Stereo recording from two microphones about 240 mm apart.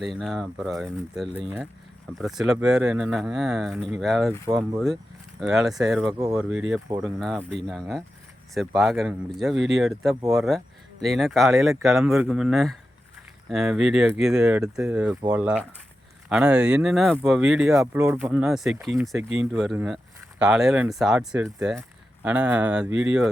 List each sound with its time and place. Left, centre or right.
0.0 s speech: centre
5.4 s speech: centre